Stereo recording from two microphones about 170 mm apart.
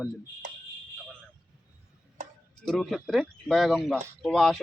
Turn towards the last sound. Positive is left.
turn(degrees=0)  # may be behind; listen again after turning